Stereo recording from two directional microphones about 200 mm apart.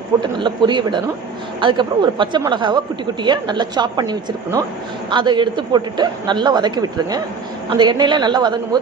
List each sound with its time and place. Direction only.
0.2 s a woman's voice: 25° right (ahead or behind)